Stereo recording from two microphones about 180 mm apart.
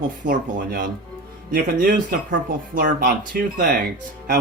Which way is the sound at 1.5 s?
55° right (ahead or behind).